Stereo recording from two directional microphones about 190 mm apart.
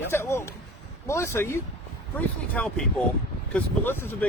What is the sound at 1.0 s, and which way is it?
Speech, 15° left (ahead or behind).